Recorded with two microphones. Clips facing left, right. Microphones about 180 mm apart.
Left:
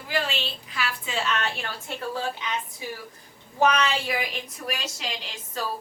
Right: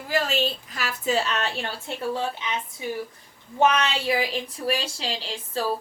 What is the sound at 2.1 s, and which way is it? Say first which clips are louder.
Speech: right 1 dB; 20° right (ahead or behind).